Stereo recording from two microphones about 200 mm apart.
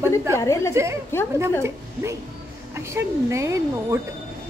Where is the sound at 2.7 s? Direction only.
15° right (ahead or behind).